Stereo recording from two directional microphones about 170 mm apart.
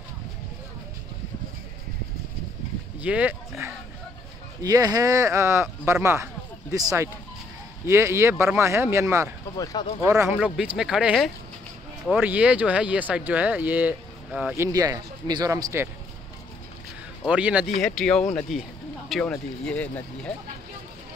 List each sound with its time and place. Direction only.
3.0 s speech: 10° right (ahead or behind)
4.6 s speech: 20° right (ahead or behind)
9.6 s speech: 20° left (ahead or behind)
10.0 s speech: 15° right (ahead or behind)
10.5 s speech: 5° right (ahead or behind)
17.3 s speech: 10° right (ahead or behind)
17.7 s speech: 5° left (ahead or behind)